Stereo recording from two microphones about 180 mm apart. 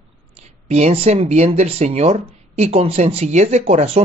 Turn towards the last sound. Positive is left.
turn(degrees=-40)  # may be behind; listen again after turning